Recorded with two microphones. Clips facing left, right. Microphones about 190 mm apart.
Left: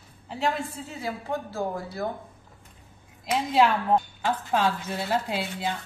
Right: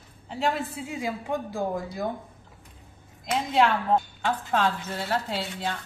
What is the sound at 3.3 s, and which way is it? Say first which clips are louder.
Speech: left 1 dB; 5° left (ahead or behind).